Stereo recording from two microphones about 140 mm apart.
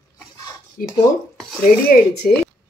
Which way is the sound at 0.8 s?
80° left.